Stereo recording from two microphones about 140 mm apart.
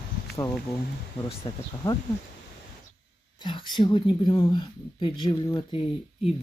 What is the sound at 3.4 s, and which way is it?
Speech, 35° left (ahead or behind).